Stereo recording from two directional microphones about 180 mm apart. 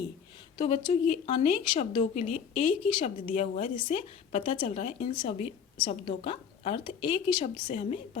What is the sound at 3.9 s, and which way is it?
A woman's voice, 35° left (ahead or behind).